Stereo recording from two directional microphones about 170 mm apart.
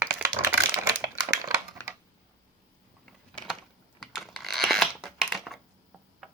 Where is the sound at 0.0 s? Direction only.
10° right (ahead or behind).